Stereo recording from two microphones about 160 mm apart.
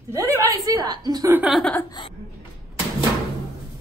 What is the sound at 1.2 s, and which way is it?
Speech, 10° right (ahead or behind).